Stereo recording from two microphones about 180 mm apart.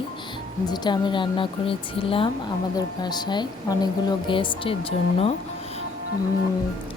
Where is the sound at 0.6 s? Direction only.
25° left (ahead or behind).